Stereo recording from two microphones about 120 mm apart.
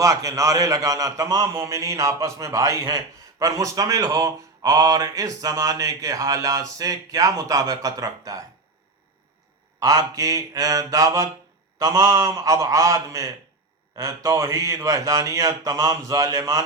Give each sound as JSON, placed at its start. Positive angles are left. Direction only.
{"t": 0.0, "sound": "a man's voice", "side_deg": -25}
{"t": 9.8, "sound": "a man's voice", "side_deg": -25}